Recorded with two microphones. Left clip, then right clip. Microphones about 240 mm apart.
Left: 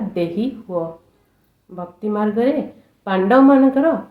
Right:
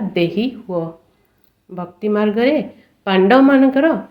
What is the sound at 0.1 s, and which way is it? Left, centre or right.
Speech, right.